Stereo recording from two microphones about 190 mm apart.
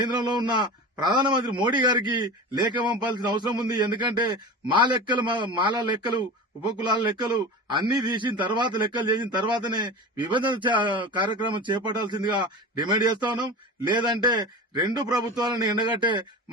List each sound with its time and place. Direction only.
0.0 s a man's voice: 25° right (ahead or behind)